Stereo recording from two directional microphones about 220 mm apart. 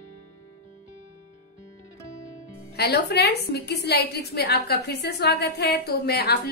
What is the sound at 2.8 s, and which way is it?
A woman's voice, 45° left (ahead or behind).